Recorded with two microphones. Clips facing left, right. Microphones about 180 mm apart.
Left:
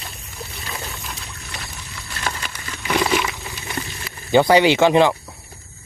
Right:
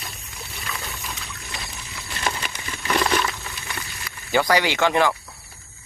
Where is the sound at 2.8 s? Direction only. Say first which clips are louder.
Left 2 dB; 5° left (ahead or behind).